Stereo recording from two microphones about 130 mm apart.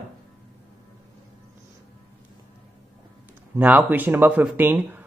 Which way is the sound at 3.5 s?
15° right (ahead or behind).